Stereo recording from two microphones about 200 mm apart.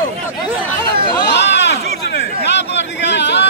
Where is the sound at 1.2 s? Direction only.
60° left (ahead or behind).